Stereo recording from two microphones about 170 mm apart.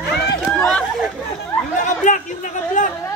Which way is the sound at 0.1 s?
5° left (ahead or behind).